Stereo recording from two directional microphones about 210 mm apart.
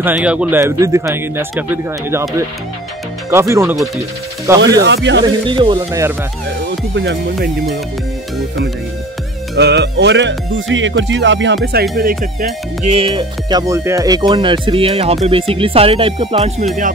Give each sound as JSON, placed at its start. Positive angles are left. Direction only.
{"t": 0.0, "sound": "a man's voice", "side_deg": -5}
{"t": 3.3, "sound": "a man's voice", "side_deg": -15}
{"t": 4.8, "sound": "speech", "side_deg": -55}
{"t": 5.2, "sound": "speech", "side_deg": -20}
{"t": 6.9, "sound": "speech", "side_deg": -55}
{"t": 9.6, "sound": "speech", "side_deg": -55}
{"t": 12.0, "sound": "music", "side_deg": -40}
{"t": 12.9, "sound": "speech", "side_deg": -25}